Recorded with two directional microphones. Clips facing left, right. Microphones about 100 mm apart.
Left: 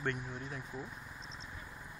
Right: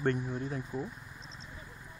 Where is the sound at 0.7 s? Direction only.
5° right (ahead or behind).